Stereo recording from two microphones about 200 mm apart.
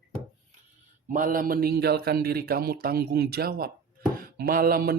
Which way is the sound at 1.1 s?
40° right (ahead or behind).